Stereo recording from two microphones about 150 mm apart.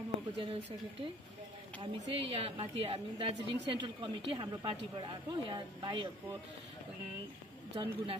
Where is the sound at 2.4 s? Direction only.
40° right (ahead or behind).